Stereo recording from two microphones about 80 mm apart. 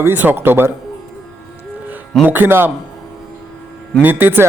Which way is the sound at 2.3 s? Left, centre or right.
Right.